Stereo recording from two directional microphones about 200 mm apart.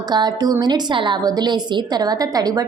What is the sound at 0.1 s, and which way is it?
A woman's voice, 20° right (ahead or behind).